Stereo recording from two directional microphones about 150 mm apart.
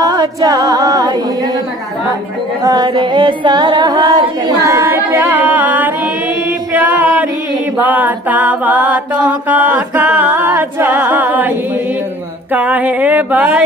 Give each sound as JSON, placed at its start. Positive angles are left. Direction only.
{"t": 0.0, "sound": "chant", "side_deg": -25}
{"t": 2.6, "sound": "singing", "side_deg": -30}
{"t": 7.7, "sound": "mantra", "side_deg": -10}